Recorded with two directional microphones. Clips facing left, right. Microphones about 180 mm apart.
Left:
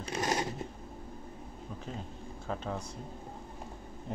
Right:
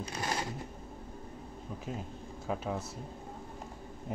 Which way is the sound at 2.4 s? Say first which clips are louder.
Right 2 dB; 10° right (ahead or behind).